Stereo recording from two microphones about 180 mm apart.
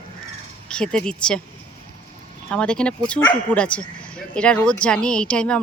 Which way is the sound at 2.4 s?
5° left (ahead or behind).